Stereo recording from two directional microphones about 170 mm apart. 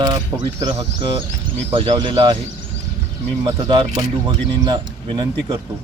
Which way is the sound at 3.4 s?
25° right (ahead or behind).